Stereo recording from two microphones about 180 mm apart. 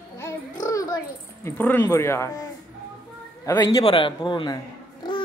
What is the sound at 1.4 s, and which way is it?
Speech, 15° left (ahead or behind).